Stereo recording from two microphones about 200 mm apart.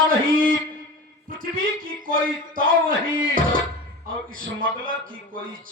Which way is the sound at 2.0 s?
45° right (ahead or behind).